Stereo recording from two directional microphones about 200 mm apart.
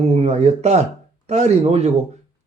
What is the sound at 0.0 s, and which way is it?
Speech, 30° right (ahead or behind).